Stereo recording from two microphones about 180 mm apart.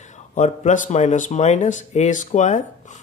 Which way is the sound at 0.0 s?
45° left (ahead or behind).